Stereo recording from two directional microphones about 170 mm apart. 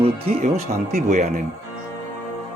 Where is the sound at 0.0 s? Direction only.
35° right (ahead or behind).